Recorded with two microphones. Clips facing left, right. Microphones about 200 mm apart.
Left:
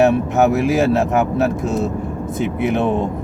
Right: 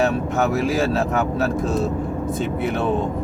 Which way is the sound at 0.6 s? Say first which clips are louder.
Left 4 dB; 20° left (ahead or behind).